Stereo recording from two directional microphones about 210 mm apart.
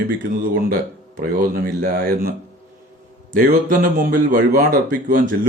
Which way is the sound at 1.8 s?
45° right (ahead or behind).